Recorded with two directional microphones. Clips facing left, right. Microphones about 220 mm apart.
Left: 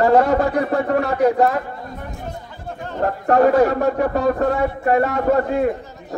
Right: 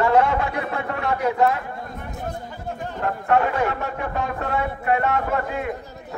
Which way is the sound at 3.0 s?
40° left (ahead or behind).